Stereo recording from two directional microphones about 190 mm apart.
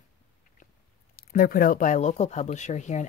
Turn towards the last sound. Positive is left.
turn(degrees=40)  # may be behind; listen again after turning